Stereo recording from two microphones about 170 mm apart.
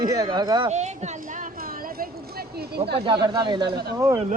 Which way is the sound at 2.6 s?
70° right (ahead or behind).